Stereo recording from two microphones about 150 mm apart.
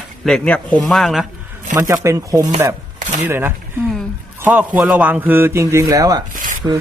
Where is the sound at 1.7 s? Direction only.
15° right (ahead or behind).